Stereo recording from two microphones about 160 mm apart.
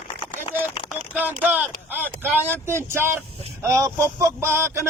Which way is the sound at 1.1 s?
10° right (ahead or behind).